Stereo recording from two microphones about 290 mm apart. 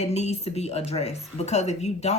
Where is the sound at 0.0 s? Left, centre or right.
Left.